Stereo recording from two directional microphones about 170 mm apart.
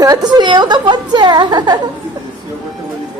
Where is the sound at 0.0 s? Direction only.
20° right (ahead or behind).